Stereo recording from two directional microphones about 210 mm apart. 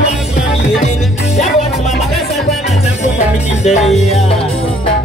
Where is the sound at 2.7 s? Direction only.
30° left (ahead or behind).